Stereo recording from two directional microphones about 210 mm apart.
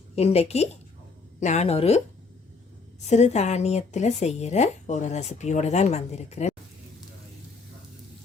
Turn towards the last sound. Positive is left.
turn(degrees=30)  # may be behind; listen again after turning